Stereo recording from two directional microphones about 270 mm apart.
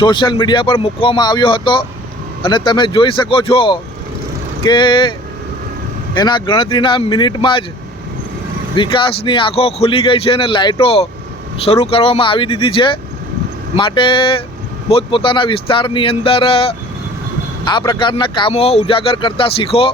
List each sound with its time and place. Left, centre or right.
0.0 s speech: centre
6.1 s speech: centre
8.7 s speech: centre